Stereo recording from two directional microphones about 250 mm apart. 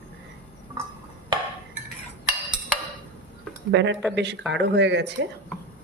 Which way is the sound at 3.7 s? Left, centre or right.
Right.